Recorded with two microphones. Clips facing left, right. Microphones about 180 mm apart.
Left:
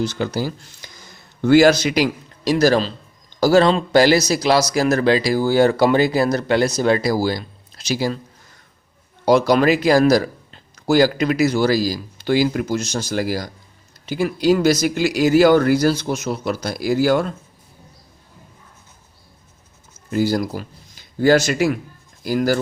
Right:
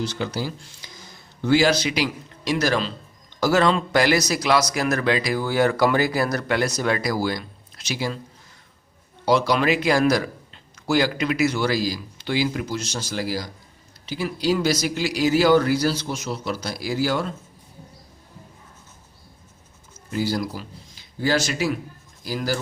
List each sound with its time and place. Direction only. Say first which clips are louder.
0.0 s a man's voice: left 5 dB; 45° left (ahead or behind)
9.2 s a man's voice: left 5 dB; 45° left (ahead or behind)
20.1 s speech: left 5 dB; 50° left (ahead or behind)